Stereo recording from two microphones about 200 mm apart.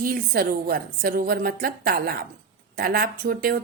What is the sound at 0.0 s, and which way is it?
A woman's voice, 45° right (ahead or behind).